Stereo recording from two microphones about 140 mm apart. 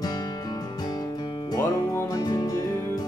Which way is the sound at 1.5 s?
25° left (ahead or behind).